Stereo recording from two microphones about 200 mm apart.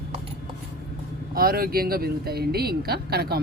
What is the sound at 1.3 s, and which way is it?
Speech, 50° right (ahead or behind).